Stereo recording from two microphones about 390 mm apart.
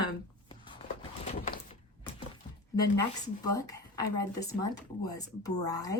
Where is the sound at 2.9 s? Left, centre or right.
Right.